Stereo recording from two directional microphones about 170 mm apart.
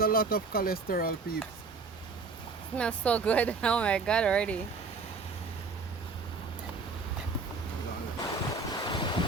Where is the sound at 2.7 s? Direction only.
5° left (ahead or behind).